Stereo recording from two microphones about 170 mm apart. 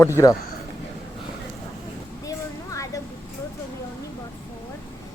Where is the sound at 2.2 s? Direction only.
20° left (ahead or behind).